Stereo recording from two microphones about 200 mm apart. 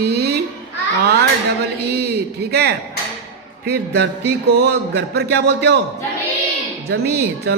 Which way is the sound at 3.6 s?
55° right (ahead or behind).